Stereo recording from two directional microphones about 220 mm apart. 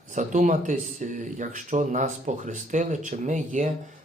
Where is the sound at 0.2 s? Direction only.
35° right (ahead or behind).